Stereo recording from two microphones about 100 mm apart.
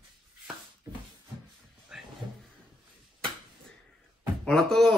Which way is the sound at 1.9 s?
10° right (ahead or behind).